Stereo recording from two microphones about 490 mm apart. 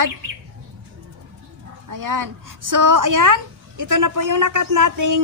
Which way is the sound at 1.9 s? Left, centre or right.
Right.